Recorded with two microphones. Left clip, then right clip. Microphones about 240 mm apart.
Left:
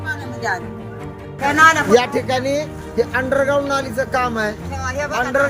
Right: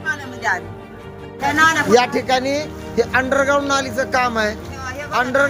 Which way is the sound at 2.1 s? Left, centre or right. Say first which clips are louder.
Right 1 dB; centre.